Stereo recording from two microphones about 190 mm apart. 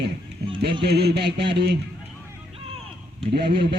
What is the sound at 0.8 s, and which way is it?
Speech, 60° right (ahead or behind).